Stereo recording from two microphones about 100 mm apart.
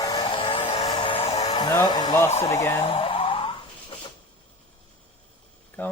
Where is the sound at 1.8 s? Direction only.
45° left (ahead or behind).